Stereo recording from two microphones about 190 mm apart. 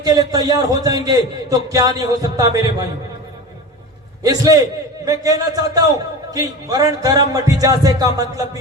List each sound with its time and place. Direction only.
0.0 s a man's voice: 20° right (ahead or behind)
4.2 s a man's voice: 20° right (ahead or behind)